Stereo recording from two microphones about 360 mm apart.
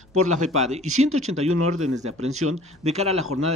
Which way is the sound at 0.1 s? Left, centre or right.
Right.